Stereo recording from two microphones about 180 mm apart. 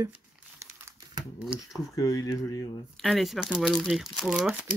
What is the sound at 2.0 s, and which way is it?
Speech, 20° left (ahead or behind).